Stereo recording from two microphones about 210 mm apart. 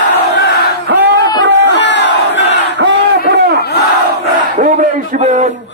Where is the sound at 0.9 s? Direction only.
60° right (ahead or behind).